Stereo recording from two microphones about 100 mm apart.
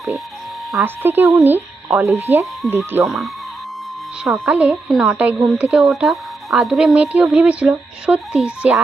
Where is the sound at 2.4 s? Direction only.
Centre (ahead or behind).